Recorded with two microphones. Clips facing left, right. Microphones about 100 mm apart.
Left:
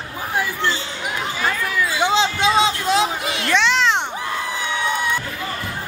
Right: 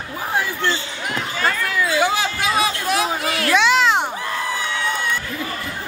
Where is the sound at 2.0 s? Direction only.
20° left (ahead or behind).